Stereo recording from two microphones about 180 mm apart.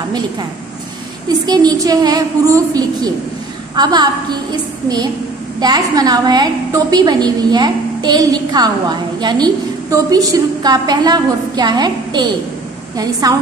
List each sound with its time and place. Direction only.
1.4 s a woman's voice: 20° right (ahead or behind)
5.6 s a woman's voice: 20° right (ahead or behind)